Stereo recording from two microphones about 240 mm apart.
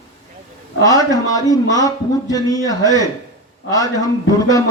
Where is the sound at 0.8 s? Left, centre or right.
Centre.